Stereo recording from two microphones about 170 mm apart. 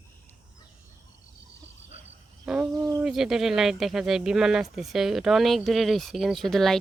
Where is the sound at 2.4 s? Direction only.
5° right (ahead or behind).